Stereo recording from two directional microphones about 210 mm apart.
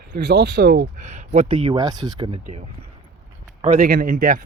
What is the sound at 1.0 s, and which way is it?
Speech, 35° right (ahead or behind).